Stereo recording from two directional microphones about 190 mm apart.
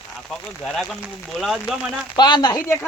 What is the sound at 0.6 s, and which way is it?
Speech, centre (ahead or behind).